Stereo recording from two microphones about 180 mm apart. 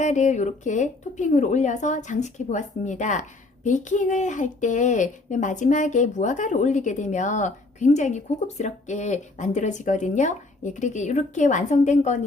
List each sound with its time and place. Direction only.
0.0 s speech: 40° left (ahead or behind)